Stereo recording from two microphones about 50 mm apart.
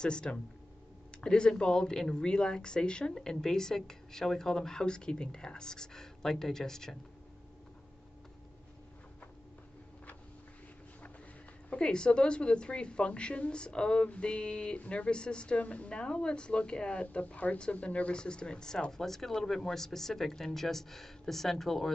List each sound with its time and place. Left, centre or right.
0.0 s speech: centre
11.7 s a woman's voice: centre